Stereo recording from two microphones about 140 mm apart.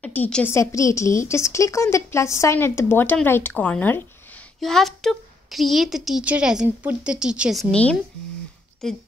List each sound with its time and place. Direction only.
0.0 s speech: 10° left (ahead or behind)
0.6 s a woman's voice: 20° left (ahead or behind); by 7.7 s 5° right (ahead or behind)
7.7 s a woman's voice: 10° left (ahead or behind)